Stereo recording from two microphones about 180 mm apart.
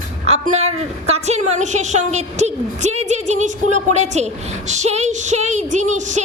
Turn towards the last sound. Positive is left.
turn(degrees=-40)  # may be behind; listen again after turning